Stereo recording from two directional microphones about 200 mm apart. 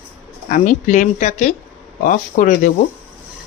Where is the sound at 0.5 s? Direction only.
40° left (ahead or behind).